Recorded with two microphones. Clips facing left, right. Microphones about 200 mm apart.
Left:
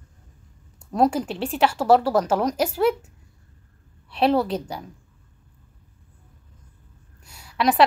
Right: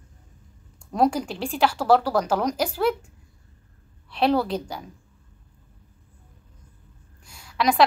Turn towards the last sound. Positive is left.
turn(degrees=5)  # may be behind; listen again after turning